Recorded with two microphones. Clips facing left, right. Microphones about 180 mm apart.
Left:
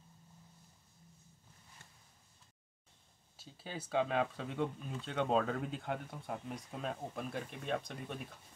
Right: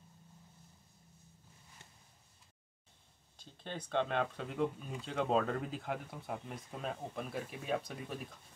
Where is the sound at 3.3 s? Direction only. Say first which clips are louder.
Right 1 dB; 5° left (ahead or behind).